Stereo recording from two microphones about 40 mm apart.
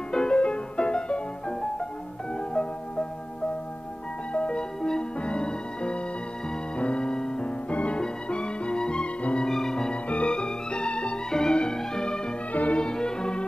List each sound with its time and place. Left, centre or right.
0.1 s music: left
4.3 s music: left
7.7 s music: left
9.4 s music: centre
10.0 s music: left
12.5 s music: left
12.8 s music: centre